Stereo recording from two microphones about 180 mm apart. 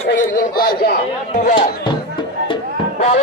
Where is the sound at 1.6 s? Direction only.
25° left (ahead or behind).